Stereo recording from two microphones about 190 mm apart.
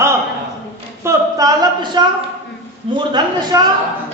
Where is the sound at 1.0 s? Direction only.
20° right (ahead or behind).